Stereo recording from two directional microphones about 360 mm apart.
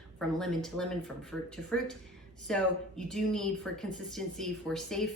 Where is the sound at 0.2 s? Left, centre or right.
Centre.